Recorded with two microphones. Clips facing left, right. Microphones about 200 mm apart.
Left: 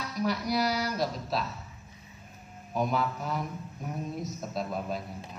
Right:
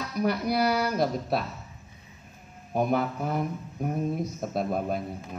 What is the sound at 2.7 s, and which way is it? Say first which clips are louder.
Speech: right 4 dB; 55° right (ahead or behind).